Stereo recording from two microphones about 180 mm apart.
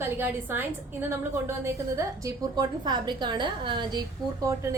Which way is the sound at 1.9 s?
20° right (ahead or behind).